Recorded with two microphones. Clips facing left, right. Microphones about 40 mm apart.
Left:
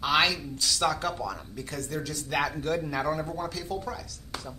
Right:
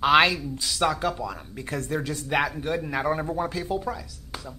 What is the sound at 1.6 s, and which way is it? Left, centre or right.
Speech, right.